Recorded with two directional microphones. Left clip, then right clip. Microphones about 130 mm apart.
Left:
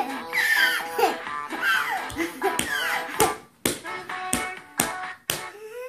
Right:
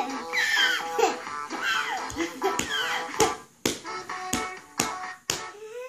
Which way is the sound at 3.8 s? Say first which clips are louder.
Left 2 dB; 35° left (ahead or behind).